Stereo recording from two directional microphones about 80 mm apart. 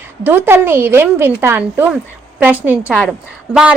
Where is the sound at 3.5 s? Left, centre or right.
Centre.